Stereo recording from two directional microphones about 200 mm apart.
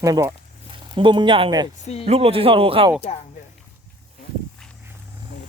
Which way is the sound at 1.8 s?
30° left (ahead or behind).